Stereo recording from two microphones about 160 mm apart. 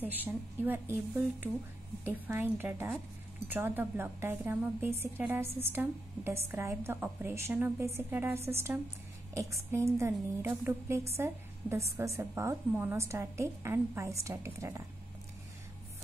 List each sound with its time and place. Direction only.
0.0 s a woman's voice: 10° right (ahead or behind)